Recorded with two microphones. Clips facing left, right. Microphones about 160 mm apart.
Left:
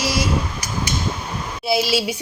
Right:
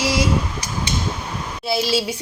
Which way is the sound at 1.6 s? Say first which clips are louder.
Left 1 dB; 10° left (ahead or behind).